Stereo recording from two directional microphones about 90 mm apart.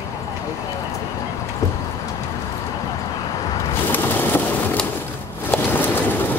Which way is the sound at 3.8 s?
20° left (ahead or behind).